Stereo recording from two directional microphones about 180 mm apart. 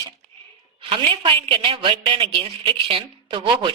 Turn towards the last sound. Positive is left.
turn(degrees=-30)  # may be behind; listen again after turning